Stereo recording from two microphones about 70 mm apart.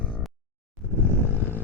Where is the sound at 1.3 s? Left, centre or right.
Left.